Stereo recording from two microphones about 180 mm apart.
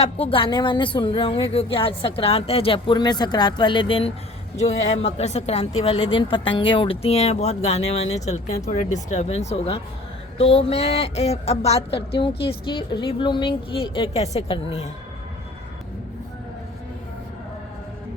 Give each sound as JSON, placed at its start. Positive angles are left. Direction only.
{"t": 0.0, "sound": "a woman's voice", "side_deg": 30}